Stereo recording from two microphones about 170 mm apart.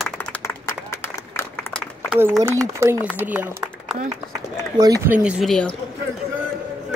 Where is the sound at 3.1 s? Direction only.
10° right (ahead or behind).